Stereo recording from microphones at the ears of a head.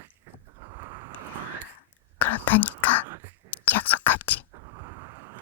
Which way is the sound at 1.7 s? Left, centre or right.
Left.